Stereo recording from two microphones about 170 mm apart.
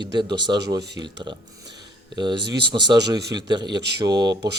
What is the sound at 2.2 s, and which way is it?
Speech, 25° right (ahead or behind).